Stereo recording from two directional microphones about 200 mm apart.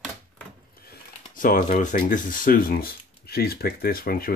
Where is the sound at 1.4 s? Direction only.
40° left (ahead or behind).